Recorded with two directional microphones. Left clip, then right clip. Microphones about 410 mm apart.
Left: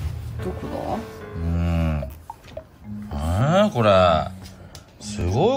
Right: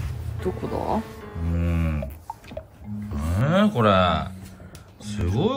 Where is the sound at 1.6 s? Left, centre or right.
Centre.